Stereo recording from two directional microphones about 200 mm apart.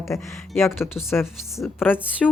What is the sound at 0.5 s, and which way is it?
A woman's voice, 10° left (ahead or behind).